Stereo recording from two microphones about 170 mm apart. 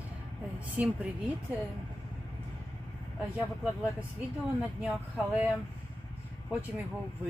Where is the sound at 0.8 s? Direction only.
10° right (ahead or behind).